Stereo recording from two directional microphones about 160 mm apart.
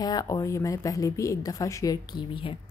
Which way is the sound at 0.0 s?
25° left (ahead or behind).